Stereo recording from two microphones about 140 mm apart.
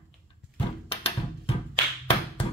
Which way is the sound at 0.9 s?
45° left (ahead or behind).